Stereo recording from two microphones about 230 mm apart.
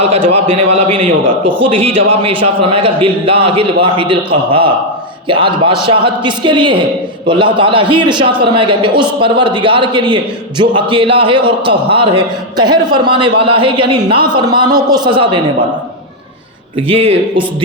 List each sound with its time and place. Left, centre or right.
0.0 s a man's voice: right
16.7 s a man's voice: right